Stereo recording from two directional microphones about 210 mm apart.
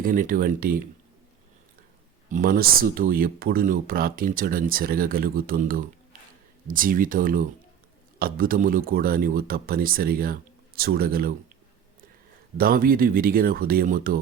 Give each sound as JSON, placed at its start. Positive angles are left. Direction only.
{"t": 0.0, "sound": "speech", "side_deg": -40}
{"t": 2.3, "sound": "speech", "side_deg": -45}
{"t": 12.5, "sound": "speech", "side_deg": -45}